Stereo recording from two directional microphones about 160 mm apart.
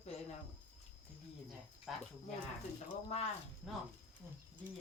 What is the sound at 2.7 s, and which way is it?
Speech, 40° left (ahead or behind).